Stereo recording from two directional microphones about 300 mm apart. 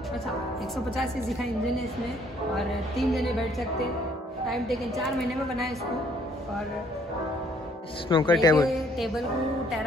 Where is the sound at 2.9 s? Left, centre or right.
Centre.